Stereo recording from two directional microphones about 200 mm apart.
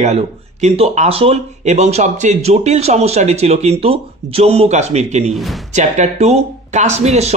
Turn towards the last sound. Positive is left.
turn(degrees=-35)  # may be behind; listen again after turning